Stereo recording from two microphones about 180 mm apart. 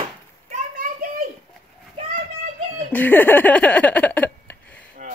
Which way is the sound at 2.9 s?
10° left (ahead or behind).